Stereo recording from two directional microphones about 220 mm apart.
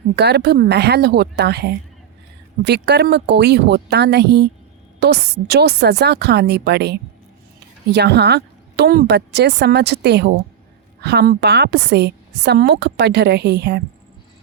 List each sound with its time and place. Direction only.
0.2 s a woman's voice: 50° right (ahead or behind)